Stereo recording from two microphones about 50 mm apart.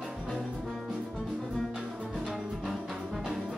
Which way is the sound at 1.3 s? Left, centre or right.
Centre.